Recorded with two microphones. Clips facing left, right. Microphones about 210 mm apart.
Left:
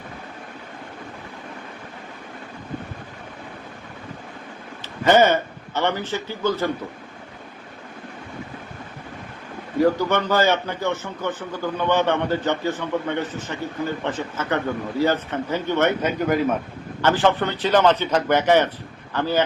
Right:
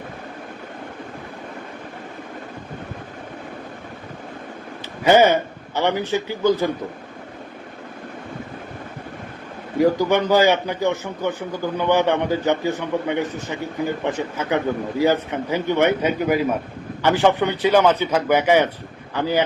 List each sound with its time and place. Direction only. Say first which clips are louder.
5.0 s a man's voice: right 2 dB; 10° right (ahead or behind)
9.8 s speech: right 2 dB; 15° right (ahead or behind)